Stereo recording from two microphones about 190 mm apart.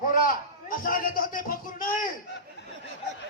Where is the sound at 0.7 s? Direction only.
45° left (ahead or behind).